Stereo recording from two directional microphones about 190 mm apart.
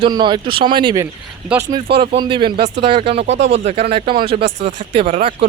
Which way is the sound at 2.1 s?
25° right (ahead or behind).